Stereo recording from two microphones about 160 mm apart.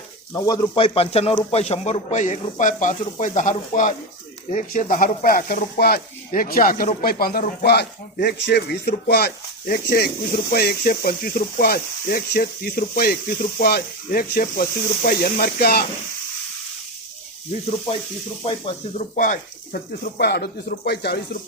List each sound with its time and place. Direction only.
0.3 s speech: 20° left (ahead or behind)
0.8 s a man's voice: 35° left (ahead or behind); by 15.8 s 75° left (ahead or behind)
18.9 s speech: 55° left (ahead or behind); by 21.2 s 90° left